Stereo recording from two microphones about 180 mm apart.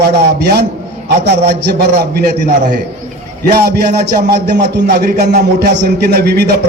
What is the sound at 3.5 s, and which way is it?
A man's voice, 60° right (ahead or behind).